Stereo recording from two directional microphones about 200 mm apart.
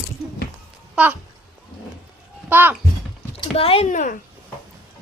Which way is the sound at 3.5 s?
30° left (ahead or behind).